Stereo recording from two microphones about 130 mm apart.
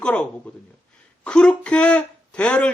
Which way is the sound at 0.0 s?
10° left (ahead or behind).